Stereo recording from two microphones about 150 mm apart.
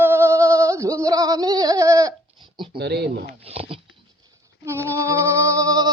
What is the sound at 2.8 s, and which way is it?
Speech, 90° right.